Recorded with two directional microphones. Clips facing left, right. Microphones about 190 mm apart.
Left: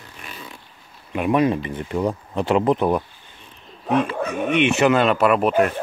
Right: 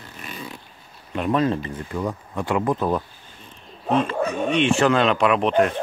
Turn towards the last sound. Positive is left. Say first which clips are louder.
# left 1 dB
turn(degrees=5)  # may be behind; listen again after turning